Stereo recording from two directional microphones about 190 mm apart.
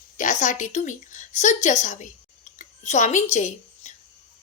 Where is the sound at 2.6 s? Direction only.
40° left (ahead or behind).